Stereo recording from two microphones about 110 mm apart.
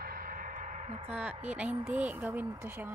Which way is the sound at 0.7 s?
80° right.